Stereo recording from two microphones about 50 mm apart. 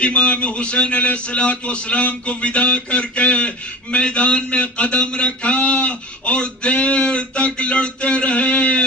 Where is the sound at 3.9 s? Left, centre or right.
Left.